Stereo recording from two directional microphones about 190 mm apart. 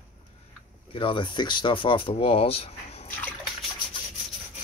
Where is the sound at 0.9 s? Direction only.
25° left (ahead or behind).